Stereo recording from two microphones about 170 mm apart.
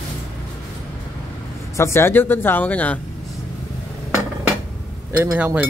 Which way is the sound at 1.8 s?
15° left (ahead or behind).